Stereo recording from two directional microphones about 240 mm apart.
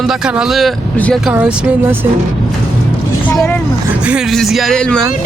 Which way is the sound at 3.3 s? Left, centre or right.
Centre.